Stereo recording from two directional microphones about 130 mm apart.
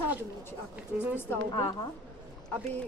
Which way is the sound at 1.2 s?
20° left (ahead or behind).